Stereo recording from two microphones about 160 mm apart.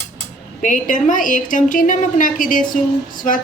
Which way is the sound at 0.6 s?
55° left (ahead or behind).